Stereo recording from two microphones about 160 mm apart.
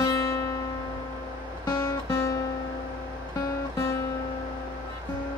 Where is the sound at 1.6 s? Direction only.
25° left (ahead or behind).